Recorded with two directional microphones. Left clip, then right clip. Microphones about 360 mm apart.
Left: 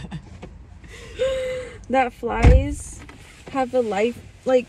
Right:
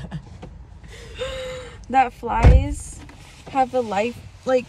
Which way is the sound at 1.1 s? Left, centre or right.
Centre.